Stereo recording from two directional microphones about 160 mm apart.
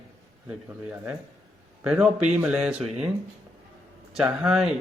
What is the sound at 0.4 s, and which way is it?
A man's voice, 10° right (ahead or behind).